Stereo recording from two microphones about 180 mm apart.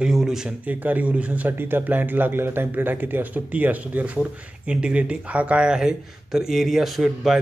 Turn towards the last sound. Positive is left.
turn(degrees=0)  # may be behind; listen again after turning